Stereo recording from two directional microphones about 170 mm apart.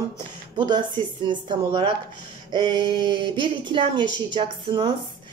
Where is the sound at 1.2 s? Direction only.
25° right (ahead or behind).